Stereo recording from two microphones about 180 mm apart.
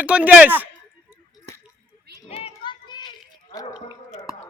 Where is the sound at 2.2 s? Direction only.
35° left (ahead or behind); by 3.8 s 20° left (ahead or behind).